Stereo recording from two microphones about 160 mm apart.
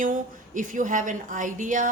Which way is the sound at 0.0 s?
55° right (ahead or behind).